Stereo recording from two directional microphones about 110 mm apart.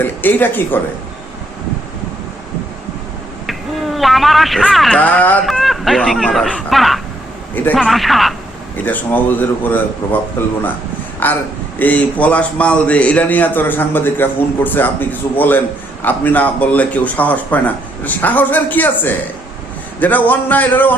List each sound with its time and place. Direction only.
0.0 s a man's voice: 15° left (ahead or behind)
3.4 s a sound: centre (ahead or behind)
4.9 s a man's voice: 15° left (ahead or behind)
5.5 s a man's voice: centre (ahead or behind)
7.5 s a man's voice: 15° left (ahead or behind)
7.8 s a man's voice: centre (ahead or behind)
8.7 s a man's voice: 15° left (ahead or behind)
11.2 s a man's voice: 15° left (ahead or behind)